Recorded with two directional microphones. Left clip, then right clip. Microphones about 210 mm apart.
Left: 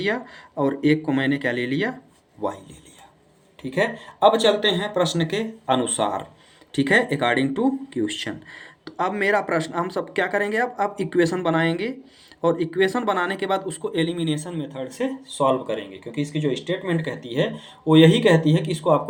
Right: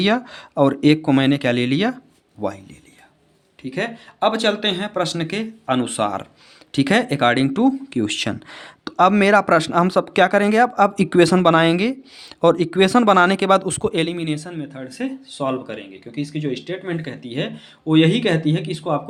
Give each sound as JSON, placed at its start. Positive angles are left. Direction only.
{"t": 0.0, "sound": "speech", "side_deg": -60}
{"t": 3.6, "sound": "speech", "side_deg": -20}
{"t": 4.2, "sound": "speech", "side_deg": -40}
{"t": 6.7, "sound": "speech", "side_deg": -50}